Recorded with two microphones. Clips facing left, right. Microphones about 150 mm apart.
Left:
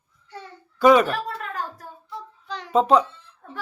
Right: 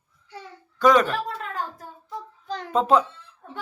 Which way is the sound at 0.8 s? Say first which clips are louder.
Left 3 dB; 10° left (ahead or behind).